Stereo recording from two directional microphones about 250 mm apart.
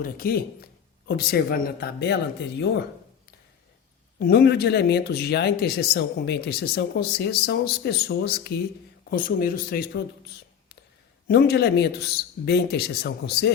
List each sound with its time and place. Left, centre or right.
0.0 s speech: left
4.2 s speech: left
11.3 s speech: left